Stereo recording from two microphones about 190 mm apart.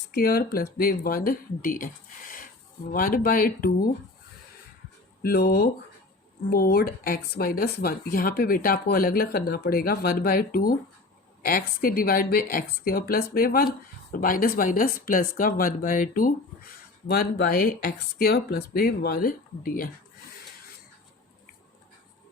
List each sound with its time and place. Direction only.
0.1 s speech: 50° left (ahead or behind)
2.9 s speech: 50° left (ahead or behind)
5.2 s speech: 55° left (ahead or behind)
17.1 s speech: 55° left (ahead or behind)